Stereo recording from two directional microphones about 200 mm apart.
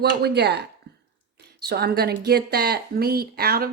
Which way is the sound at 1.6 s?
55° right (ahead or behind).